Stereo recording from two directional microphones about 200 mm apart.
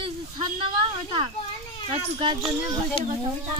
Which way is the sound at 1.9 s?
25° right (ahead or behind).